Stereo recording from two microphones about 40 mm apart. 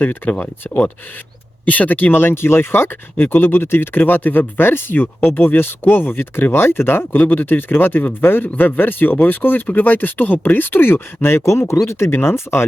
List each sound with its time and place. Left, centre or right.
1.6 s speech: left
7.2 s speech: left